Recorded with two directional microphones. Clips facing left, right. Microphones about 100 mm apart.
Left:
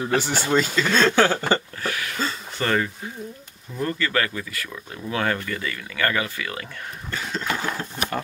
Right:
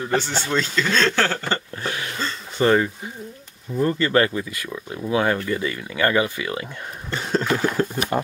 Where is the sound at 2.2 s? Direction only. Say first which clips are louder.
Left 4 dB; 5° left (ahead or behind).